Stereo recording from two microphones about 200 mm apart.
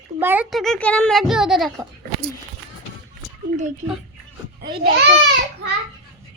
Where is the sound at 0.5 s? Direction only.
Centre (ahead or behind).